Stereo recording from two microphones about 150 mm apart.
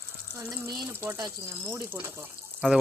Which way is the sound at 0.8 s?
15° right (ahead or behind).